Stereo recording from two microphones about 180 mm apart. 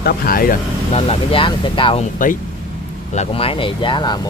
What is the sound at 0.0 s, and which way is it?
Speech, 55° left (ahead or behind).